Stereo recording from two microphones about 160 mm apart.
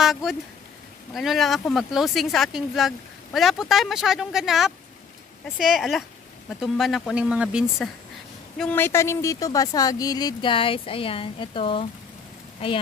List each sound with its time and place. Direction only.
0.0 s speech: centre (ahead or behind); by 11.9 s 35° left (ahead or behind)